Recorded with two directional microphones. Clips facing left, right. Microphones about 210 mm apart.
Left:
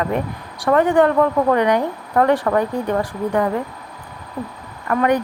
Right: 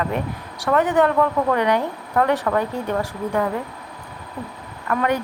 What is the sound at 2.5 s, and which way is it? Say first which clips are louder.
Speech: left 3 dB; 15° left (ahead or behind).